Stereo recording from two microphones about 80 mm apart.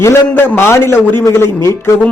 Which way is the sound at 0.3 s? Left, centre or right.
Left.